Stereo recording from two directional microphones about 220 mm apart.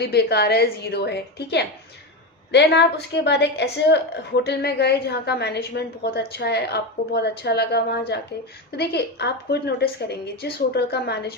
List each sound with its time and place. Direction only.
0.0 s a woman's voice: 45° left (ahead or behind)